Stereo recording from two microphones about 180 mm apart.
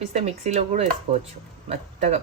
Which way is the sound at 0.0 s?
40° right (ahead or behind).